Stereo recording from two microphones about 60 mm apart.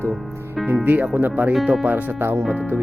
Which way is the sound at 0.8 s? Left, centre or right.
Right.